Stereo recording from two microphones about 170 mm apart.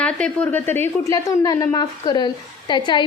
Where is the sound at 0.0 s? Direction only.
5° left (ahead or behind).